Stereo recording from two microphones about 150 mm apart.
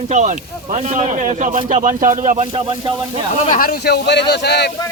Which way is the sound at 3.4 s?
65° left (ahead or behind).